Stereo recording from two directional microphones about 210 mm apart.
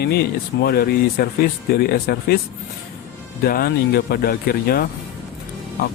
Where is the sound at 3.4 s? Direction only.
45° left (ahead or behind).